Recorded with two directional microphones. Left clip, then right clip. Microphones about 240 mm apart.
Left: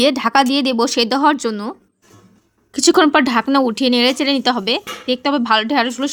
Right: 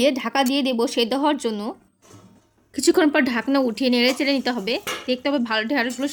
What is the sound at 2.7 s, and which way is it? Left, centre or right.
Speech, left.